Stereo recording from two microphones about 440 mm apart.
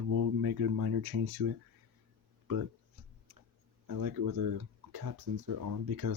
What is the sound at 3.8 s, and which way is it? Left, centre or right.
Speech, right.